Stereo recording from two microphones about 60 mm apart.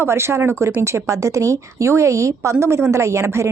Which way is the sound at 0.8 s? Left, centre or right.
Right.